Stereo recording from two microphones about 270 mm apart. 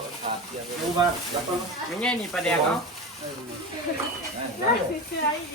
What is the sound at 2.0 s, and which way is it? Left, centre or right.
Speech, centre.